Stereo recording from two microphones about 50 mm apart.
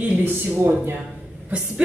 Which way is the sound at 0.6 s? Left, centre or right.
Right.